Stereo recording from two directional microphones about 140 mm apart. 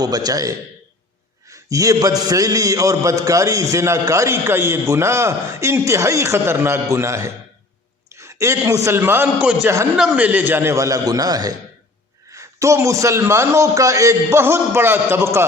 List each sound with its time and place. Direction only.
0.0 s a man's voice: 30° right (ahead or behind)
1.7 s a man's voice: 25° right (ahead or behind)